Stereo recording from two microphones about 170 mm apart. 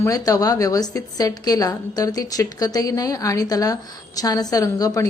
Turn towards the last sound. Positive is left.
turn(degrees=20)  # may be behind; listen again after turning